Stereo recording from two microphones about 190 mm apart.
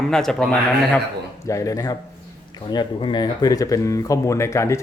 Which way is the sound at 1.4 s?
15° left (ahead or behind).